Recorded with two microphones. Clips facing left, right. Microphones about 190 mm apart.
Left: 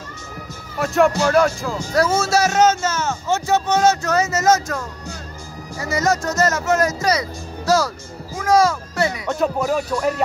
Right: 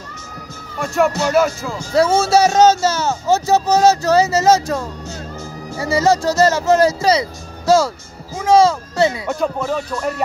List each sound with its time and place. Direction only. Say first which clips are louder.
0.7 s speech: left 1 dB; centre (ahead or behind)
2.0 s speech: right 4 dB; 30° right (ahead or behind)
9.3 s music: even; 5° left (ahead or behind)